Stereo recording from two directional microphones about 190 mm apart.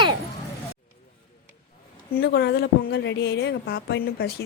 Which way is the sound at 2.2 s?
60° left (ahead or behind).